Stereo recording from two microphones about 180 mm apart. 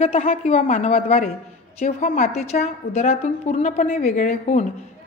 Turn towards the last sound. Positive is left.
turn(degrees=40)  # may be behind; listen again after turning